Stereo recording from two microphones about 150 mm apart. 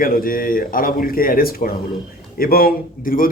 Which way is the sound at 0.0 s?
70° left (ahead or behind).